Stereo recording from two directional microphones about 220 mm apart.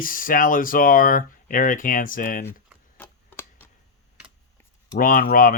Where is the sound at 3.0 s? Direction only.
10° left (ahead or behind).